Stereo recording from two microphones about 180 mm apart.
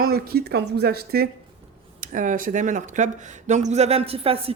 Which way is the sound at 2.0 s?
45° right (ahead or behind).